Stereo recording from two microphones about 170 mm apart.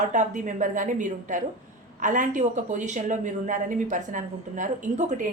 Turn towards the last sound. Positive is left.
turn(degrees=-45)  # may be behind; listen again after turning